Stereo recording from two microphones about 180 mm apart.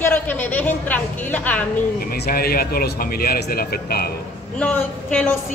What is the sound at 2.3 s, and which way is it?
Speech, 55° left (ahead or behind).